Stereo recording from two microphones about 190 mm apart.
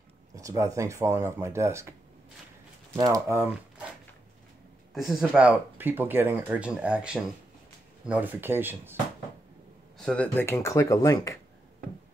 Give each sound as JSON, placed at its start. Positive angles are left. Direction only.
{"t": 0.4, "sound": "speech", "side_deg": -15}
{"t": 3.0, "sound": "speech", "side_deg": -15}
{"t": 4.9, "sound": "speech", "side_deg": -5}
{"t": 9.9, "sound": "speech", "side_deg": 5}